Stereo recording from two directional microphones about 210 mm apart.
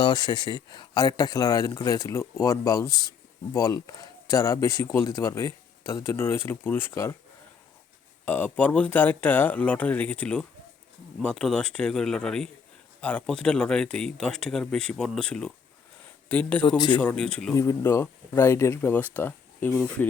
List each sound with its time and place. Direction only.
0.0 s a man's voice: 20° left (ahead or behind)
8.2 s a man's voice: 10° left (ahead or behind)
16.6 s speech: 20° left (ahead or behind)
16.9 s speech: 5° left (ahead or behind)
17.5 s a man's voice: 15° left (ahead or behind)